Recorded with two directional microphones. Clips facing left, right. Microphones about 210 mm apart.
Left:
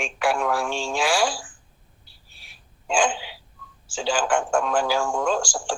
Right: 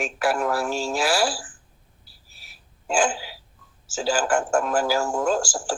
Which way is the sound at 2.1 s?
5° right (ahead or behind).